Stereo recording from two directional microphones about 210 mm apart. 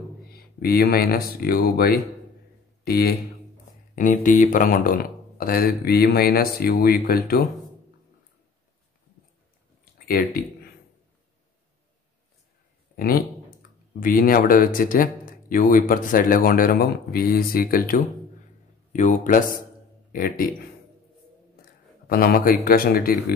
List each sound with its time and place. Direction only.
0.3 s speech: 45° left (ahead or behind)
10.0 s speech: 45° left (ahead or behind)
12.9 s a man's voice: 45° left (ahead or behind)
22.0 s speech: 45° left (ahead or behind)